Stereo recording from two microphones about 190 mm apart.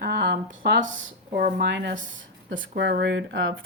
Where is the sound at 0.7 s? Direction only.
75° right (ahead or behind).